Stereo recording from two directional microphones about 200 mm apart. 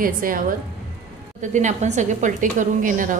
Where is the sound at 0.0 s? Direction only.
45° right (ahead or behind).